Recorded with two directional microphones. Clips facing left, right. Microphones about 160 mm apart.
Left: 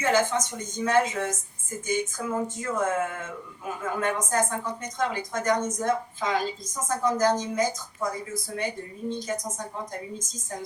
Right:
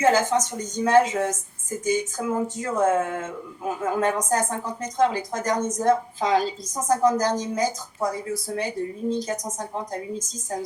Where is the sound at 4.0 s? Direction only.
35° right (ahead or behind).